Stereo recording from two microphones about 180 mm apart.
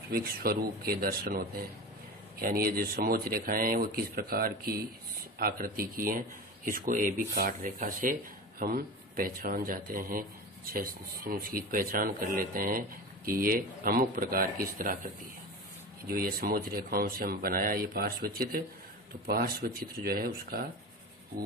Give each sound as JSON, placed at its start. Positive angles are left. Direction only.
{"t": 0.1, "sound": "speech", "side_deg": -55}
{"t": 16.1, "sound": "speech", "side_deg": -55}